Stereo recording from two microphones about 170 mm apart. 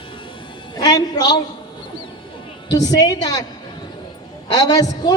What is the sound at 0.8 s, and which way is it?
Speech, 25° left (ahead or behind).